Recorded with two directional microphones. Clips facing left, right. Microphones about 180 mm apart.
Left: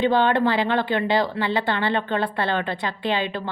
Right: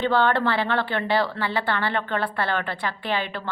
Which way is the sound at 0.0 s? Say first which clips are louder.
Left 2 dB; 15° left (ahead or behind).